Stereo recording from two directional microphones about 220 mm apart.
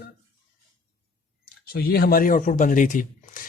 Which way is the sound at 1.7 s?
45° left (ahead or behind).